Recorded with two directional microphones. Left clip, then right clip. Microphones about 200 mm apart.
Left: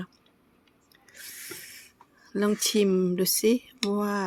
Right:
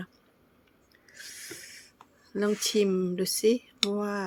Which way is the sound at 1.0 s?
15° left (ahead or behind).